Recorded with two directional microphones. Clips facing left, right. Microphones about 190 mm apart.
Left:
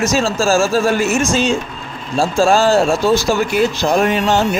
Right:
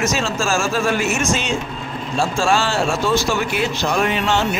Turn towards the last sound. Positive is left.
turn(degrees=45)  # may be behind; listen again after turning